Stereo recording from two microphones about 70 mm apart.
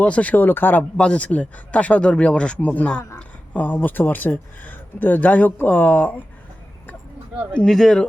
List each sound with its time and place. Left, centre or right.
0.0 s speech: left
0.9 s speech: centre
7.5 s speech: centre